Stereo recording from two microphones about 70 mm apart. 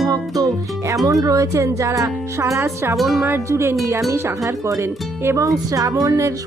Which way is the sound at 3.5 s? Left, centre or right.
Right.